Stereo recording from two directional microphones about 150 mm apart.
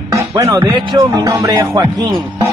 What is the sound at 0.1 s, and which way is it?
Speech, 20° right (ahead or behind).